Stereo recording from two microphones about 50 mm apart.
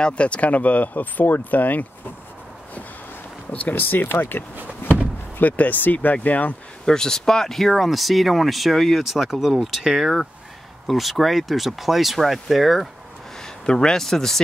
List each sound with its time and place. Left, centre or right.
0.0 s speech: left
3.5 s speech: left
5.4 s speech: left
6.9 s speech: centre
13.4 s speech: centre